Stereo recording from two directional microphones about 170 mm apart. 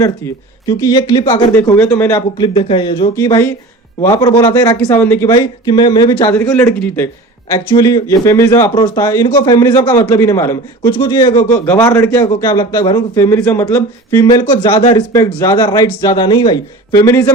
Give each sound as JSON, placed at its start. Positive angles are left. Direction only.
{"t": 0.0, "sound": "a man's voice", "side_deg": 20}
{"t": 1.8, "sound": "a man's voice", "side_deg": 15}
{"t": 7.7, "sound": "a man's voice", "side_deg": 20}
{"t": 10.9, "sound": "a man's voice", "side_deg": 25}
{"t": 11.6, "sound": "a man's voice", "side_deg": 15}